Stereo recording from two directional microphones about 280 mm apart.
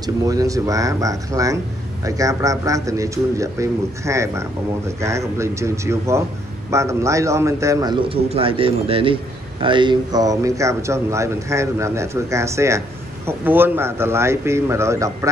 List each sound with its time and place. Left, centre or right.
0.0 s a man's voice: centre